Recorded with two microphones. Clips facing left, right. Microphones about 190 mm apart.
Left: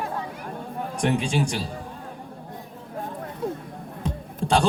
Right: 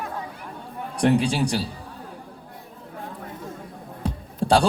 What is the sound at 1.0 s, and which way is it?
Speech, 35° right (ahead or behind).